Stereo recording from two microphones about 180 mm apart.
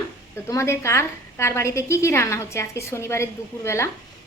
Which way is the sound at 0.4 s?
15° left (ahead or behind).